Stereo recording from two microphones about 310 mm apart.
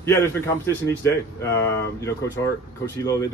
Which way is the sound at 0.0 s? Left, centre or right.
Centre.